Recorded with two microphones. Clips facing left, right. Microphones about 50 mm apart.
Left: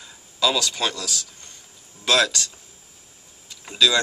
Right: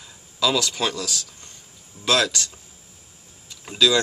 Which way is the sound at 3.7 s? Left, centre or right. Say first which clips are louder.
Right 1 dB; centre.